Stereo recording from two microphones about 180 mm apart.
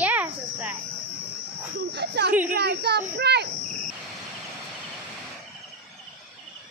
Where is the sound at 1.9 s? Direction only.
65° right (ahead or behind).